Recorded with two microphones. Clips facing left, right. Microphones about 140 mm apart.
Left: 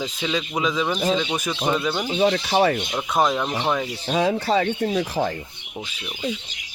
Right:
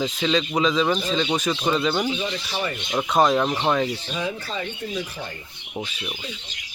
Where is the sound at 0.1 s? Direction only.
10° left (ahead or behind).